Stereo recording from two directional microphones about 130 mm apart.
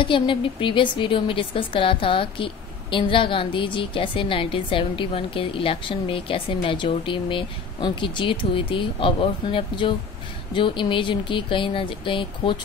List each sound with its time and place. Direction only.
0.0 s speech: 40° left (ahead or behind)